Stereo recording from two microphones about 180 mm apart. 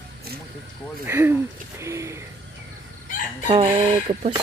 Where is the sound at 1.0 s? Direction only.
15° right (ahead or behind).